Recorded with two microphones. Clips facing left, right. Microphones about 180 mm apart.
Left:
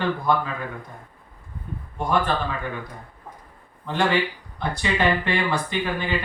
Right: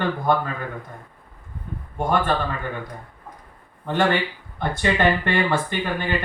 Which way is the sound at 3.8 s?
50° right (ahead or behind).